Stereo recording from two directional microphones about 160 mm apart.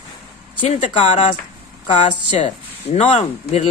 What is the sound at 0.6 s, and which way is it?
Speech, 45° left (ahead or behind).